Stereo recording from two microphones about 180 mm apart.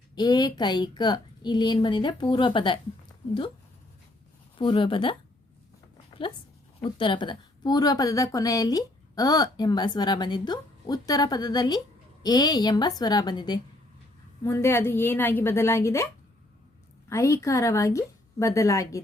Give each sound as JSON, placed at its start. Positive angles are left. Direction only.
{"t": 0.2, "sound": "a woman's voice", "side_deg": 25}
{"t": 4.5, "sound": "a woman's voice", "side_deg": 30}
{"t": 6.7, "sound": "a woman's voice", "side_deg": 30}
{"t": 17.1, "sound": "a woman's voice", "side_deg": 15}